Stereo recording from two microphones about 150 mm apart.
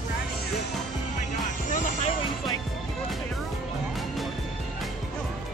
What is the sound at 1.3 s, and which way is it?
Music, 60° left (ahead or behind).